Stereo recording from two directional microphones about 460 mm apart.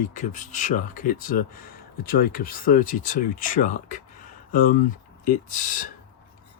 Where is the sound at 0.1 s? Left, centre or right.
Centre.